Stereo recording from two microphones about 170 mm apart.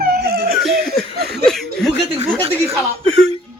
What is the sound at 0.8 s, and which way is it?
Snicker, 70° right (ahead or behind).